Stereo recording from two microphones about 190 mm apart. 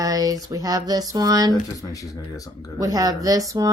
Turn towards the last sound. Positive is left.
turn(degrees=-20)  # may be behind; listen again after turning